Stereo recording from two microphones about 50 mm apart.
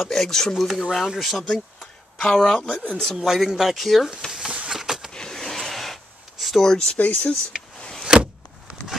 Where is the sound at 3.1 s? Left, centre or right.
Centre.